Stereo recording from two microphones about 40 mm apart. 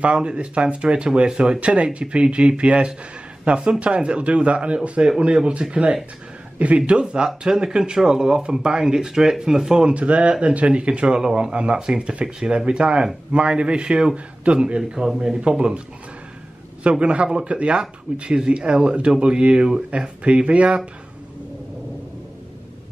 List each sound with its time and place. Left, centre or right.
0.0 s a man's voice: right
7.2 s a man's voice: centre
17.0 s speech: right